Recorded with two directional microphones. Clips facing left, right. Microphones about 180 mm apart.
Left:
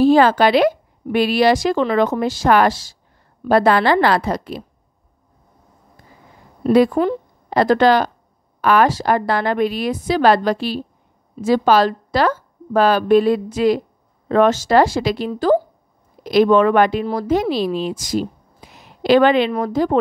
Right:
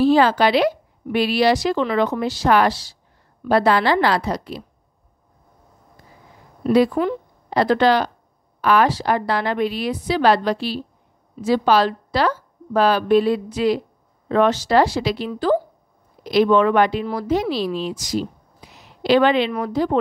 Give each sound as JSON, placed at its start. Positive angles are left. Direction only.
{"t": 0.0, "sound": "a woman's voice", "side_deg": 50}
{"t": 6.6, "sound": "a woman's voice", "side_deg": 50}